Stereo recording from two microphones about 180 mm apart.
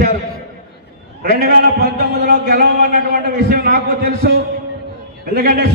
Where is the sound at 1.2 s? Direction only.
55° right (ahead or behind).